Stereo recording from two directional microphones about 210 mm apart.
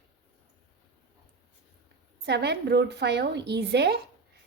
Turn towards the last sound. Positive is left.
turn(degrees=-50)  # may be behind; listen again after turning